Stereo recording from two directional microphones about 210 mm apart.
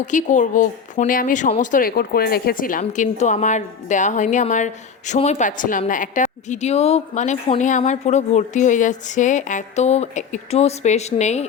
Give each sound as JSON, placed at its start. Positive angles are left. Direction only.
{"t": 0.0, "sound": "a woman's voice", "side_deg": 35}